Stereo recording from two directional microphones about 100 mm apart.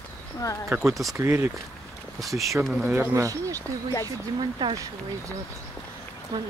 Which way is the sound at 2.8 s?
20° right (ahead or behind).